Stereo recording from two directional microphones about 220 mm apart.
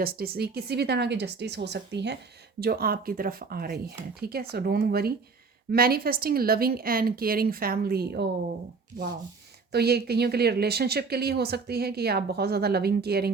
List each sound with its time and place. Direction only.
0.0 s a woman's voice: 45° right (ahead or behind)
9.7 s a woman's voice: 45° right (ahead or behind)